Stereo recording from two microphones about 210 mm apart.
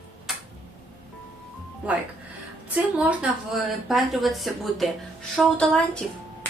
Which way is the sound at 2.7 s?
5° right (ahead or behind).